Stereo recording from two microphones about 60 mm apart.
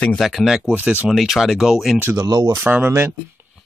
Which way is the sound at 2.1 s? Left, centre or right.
Right.